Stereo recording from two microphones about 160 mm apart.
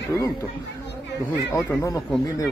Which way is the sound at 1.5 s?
20° left (ahead or behind).